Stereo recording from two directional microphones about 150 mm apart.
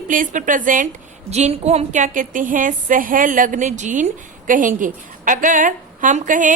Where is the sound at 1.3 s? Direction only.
45° right (ahead or behind).